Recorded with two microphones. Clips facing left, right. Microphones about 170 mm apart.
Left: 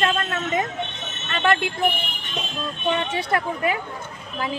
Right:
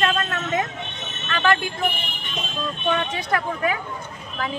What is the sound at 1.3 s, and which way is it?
Speech, 25° left (ahead or behind).